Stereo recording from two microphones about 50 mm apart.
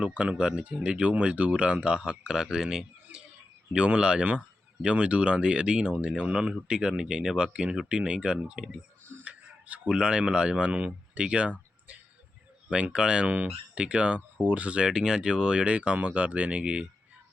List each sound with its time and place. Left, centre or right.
0.0 s speech: right
12.7 s speech: centre
14.8 s speech: centre